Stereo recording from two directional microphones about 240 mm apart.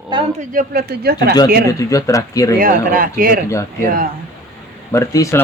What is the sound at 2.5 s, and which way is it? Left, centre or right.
Speech, right.